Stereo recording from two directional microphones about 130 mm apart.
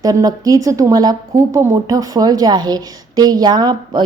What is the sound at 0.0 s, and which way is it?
A woman's voice, 30° right (ahead or behind).